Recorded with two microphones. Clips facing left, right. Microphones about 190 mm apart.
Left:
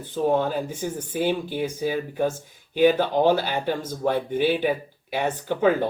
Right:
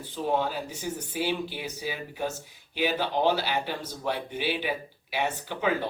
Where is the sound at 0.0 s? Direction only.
50° left (ahead or behind).